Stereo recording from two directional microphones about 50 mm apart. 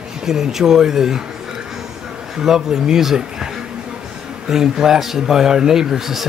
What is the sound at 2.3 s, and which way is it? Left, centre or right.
Speech, centre.